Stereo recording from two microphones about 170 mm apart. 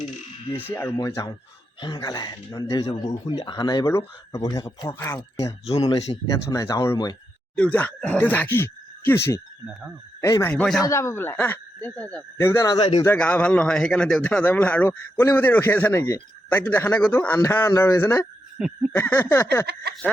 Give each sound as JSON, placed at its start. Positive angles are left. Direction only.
{"t": 0.5, "sound": "a man's voice", "side_deg": 10}
{"t": 5.6, "sound": "speech", "side_deg": 35}
{"t": 6.3, "sound": "speech", "side_deg": 20}
{"t": 7.5, "sound": "a man's voice", "side_deg": 10}
{"t": 10.5, "sound": "speech", "side_deg": 5}
{"t": 10.8, "sound": "a man's voice", "side_deg": 15}
{"t": 13.1, "sound": "a man's voice", "side_deg": 10}
{"t": 19.7, "sound": "speech", "side_deg": -75}